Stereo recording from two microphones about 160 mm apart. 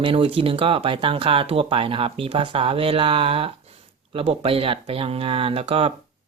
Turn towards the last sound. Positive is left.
turn(degrees=-35)  # may be behind; listen again after turning